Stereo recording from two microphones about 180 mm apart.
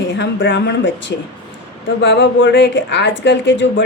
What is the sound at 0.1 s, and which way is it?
A woman's voice, 90° left.